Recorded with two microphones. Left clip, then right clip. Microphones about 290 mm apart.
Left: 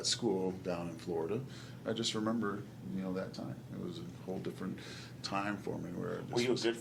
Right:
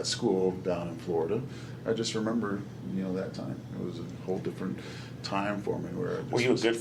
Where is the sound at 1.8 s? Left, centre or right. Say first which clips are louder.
Right 5 dB; left.